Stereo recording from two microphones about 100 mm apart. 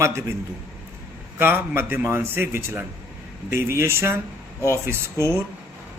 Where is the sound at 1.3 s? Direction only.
20° right (ahead or behind).